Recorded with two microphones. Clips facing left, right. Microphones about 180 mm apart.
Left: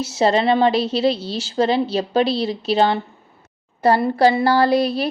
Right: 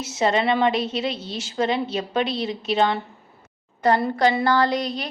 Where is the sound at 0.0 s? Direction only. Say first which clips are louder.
Left 4 dB; 35° left (ahead or behind).